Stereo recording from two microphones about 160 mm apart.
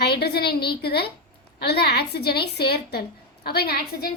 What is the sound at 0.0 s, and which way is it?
A woman's voice, 85° left.